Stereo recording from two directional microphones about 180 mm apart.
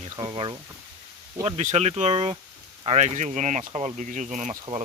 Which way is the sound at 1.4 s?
40° right (ahead or behind).